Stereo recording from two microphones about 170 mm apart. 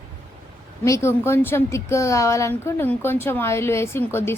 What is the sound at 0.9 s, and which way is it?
A woman's voice, 15° left (ahead or behind).